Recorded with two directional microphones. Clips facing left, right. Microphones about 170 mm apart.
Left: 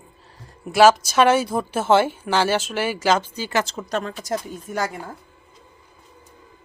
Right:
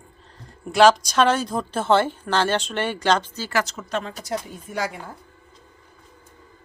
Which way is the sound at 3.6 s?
30° left (ahead or behind).